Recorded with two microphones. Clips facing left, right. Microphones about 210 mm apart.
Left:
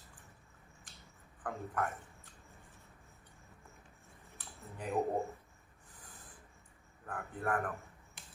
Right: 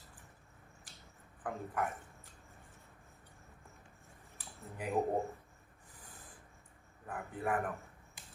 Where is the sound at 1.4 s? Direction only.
10° right (ahead or behind).